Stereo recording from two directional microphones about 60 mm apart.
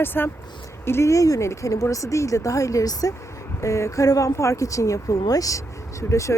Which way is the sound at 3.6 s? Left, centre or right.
Left.